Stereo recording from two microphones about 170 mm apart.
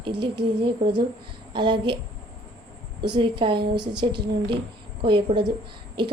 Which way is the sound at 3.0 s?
25° right (ahead or behind).